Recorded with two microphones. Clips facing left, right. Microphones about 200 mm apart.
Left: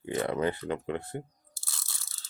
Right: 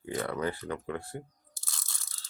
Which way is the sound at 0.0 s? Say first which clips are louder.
Left 3 dB; 20° left (ahead or behind).